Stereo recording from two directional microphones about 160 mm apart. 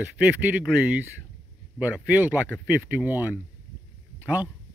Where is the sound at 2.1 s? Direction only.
10° right (ahead or behind).